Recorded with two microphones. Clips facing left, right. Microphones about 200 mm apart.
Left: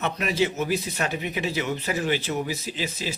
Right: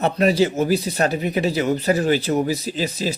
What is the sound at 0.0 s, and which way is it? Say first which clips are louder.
Speech: right 7 dB; 35° right (ahead or behind).